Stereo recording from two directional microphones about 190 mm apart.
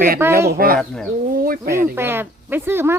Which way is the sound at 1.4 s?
50° right (ahead or behind).